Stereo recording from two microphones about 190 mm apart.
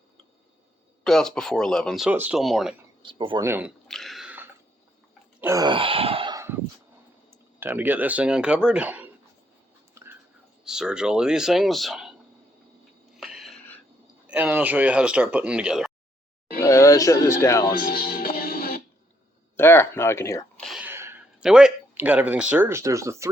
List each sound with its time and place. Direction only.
1.0 s speech: 5° left (ahead or behind)
3.0 s speech: 25° right (ahead or behind)
3.8 s a sound: centre (ahead or behind)
5.4 s wail: 15° right (ahead or behind)
7.3 s speech: 10° right (ahead or behind)
9.9 s whispering: 15° right (ahead or behind)
10.6 s speech: 5° right (ahead or behind)
13.1 s a sound: centre (ahead or behind)
14.3 s speech: 10° right (ahead or behind)
16.6 s speech: 15° left (ahead or behind)
17.7 s music: 50° left (ahead or behind)
19.5 s speech: 10° left (ahead or behind)
20.6 s a sound: centre (ahead or behind)